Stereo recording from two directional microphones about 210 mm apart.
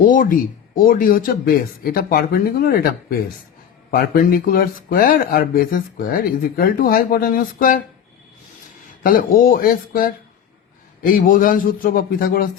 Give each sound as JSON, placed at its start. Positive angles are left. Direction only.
{"t": 0.0, "sound": "a man's voice", "side_deg": 40}
{"t": 9.0, "sound": "a man's voice", "side_deg": 40}